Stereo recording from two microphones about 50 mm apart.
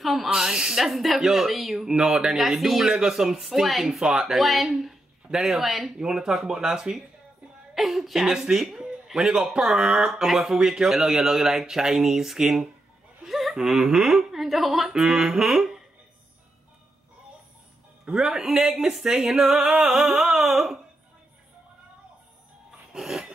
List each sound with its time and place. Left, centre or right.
0.0 s speech: centre
0.3 s speech: centre
5.9 s speech: centre
13.2 s a sound: centre
13.6 s speech: centre
18.0 s speech: centre
22.9 s a sound: centre